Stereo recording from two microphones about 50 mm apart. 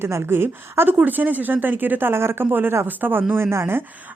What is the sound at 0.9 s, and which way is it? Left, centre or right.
Speech, right.